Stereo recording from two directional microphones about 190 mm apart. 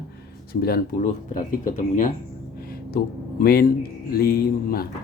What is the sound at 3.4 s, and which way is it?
Speech, 50° left (ahead or behind).